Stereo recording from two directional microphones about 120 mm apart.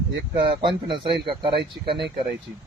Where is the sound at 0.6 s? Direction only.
45° right (ahead or behind).